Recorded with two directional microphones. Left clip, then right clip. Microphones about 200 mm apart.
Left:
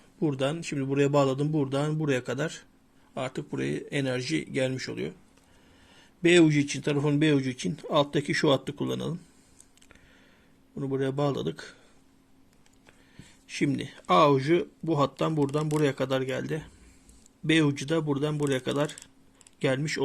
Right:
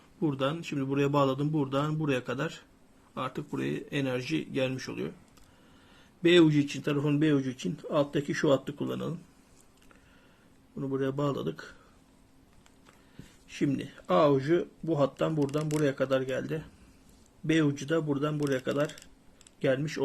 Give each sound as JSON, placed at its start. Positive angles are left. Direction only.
{"t": 0.2, "sound": "a man's voice", "side_deg": 30}
{"t": 10.8, "sound": "a man's voice", "side_deg": 40}
{"t": 13.5, "sound": "a man's voice", "side_deg": 40}